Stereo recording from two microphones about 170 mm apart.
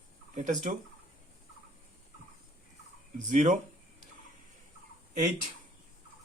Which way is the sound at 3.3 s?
45° right (ahead or behind).